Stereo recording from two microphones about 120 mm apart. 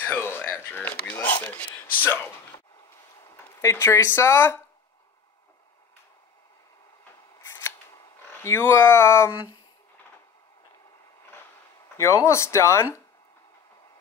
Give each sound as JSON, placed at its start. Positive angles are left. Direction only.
{"t": 0.0, "sound": "a sound", "side_deg": 20}
{"t": 3.3, "sound": "speech", "side_deg": 25}
{"t": 7.4, "sound": "scissors", "side_deg": 20}
{"t": 8.2, "sound": "speech", "side_deg": 20}
{"t": 12.0, "sound": "speech", "side_deg": 25}